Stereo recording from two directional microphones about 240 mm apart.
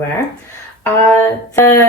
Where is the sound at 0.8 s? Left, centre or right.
Centre.